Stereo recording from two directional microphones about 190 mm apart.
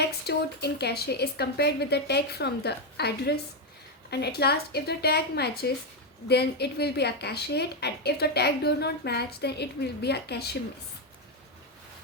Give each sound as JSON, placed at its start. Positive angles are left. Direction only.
{"t": 0.0, "sound": "a woman's voice", "side_deg": 60}